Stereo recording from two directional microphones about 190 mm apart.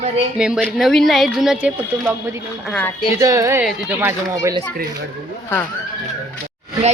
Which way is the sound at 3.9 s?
15° right (ahead or behind).